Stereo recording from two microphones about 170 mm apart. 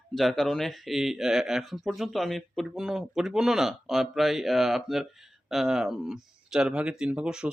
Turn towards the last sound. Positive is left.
turn(degrees=-5)  # may be behind; listen again after turning